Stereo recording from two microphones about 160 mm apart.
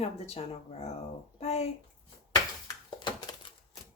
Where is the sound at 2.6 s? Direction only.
25° left (ahead or behind).